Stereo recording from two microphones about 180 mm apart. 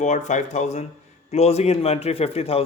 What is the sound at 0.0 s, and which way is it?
A man's voice, 40° left (ahead or behind).